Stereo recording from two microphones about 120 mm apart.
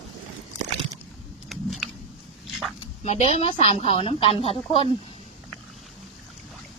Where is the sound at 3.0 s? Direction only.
70° left (ahead or behind).